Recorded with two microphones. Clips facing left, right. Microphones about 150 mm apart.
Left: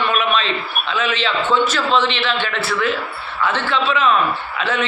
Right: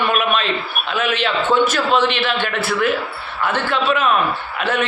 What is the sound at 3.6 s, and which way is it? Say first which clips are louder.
A man's voice: even; 50° right (ahead or behind).